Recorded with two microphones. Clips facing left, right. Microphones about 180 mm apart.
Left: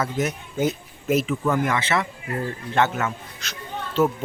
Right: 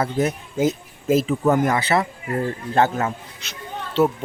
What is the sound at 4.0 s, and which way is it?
Speech, 15° right (ahead or behind).